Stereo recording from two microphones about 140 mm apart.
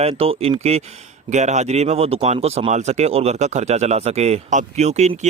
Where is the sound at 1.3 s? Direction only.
55° right (ahead or behind).